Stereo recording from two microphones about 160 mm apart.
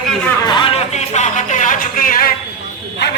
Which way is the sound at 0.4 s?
30° left (ahead or behind).